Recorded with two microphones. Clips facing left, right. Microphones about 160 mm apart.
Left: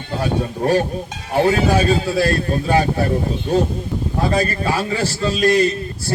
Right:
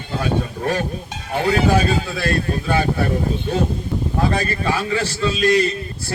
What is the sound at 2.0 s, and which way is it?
Speech, 35° left (ahead or behind).